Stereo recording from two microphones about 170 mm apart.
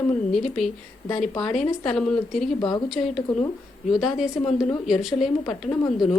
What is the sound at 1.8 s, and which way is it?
A woman's voice, 5° left (ahead or behind).